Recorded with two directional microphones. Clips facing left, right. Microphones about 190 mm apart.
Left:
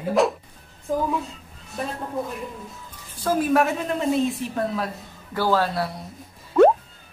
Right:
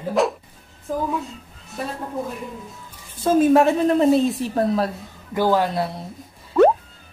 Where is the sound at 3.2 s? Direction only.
25° right (ahead or behind).